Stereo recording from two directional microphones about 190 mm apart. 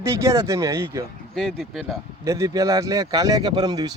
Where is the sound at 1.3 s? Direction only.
Centre (ahead or behind).